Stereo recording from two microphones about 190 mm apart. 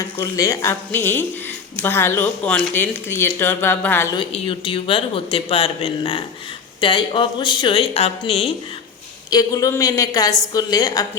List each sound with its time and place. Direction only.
0.0 s speech: 15° left (ahead or behind)
4.2 s a man's voice: 30° left (ahead or behind)
9.3 s a man's voice: 20° left (ahead or behind)